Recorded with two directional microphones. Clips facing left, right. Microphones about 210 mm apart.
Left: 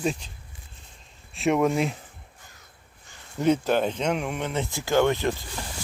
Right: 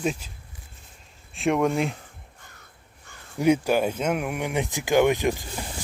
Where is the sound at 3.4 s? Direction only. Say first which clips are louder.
Right 1 dB; 10° right (ahead or behind).